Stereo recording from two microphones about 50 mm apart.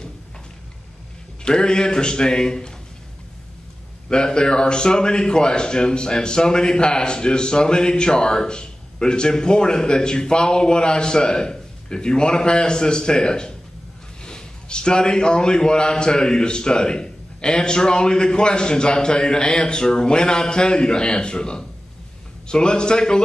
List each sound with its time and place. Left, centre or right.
1.4 s a man's voice: centre
4.1 s a man's voice: centre